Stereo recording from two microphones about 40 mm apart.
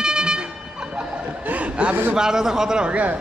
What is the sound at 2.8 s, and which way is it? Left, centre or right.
Speech, right.